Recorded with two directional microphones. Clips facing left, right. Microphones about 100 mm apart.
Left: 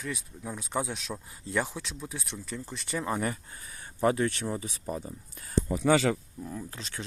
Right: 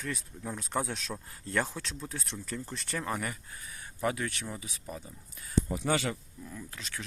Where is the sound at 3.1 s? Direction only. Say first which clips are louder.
Left 5 dB; 30° left (ahead or behind).